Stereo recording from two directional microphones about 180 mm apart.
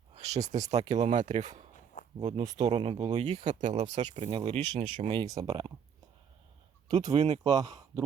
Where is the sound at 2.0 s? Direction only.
45° left (ahead or behind).